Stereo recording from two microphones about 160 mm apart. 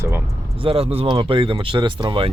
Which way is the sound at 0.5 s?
35° right (ahead or behind).